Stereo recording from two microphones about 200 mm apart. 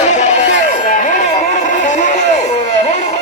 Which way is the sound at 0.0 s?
35° left (ahead or behind).